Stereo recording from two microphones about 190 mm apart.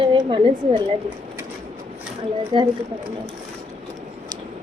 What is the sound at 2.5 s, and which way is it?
Speech, 25° right (ahead or behind).